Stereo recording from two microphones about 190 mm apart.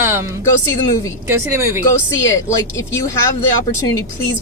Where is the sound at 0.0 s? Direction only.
10° right (ahead or behind).